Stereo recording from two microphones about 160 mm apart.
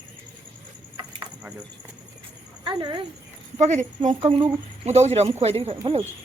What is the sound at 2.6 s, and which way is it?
Speech, 30° right (ahead or behind).